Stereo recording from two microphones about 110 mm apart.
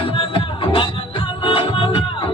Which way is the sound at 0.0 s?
50° left (ahead or behind).